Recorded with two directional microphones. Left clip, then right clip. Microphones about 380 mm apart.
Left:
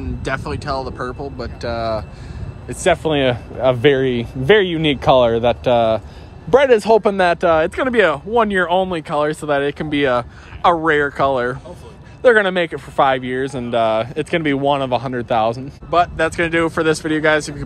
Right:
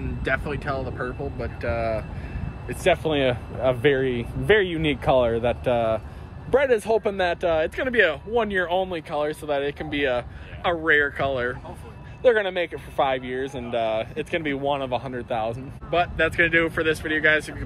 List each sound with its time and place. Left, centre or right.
0.2 s speech: centre
2.8 s speech: left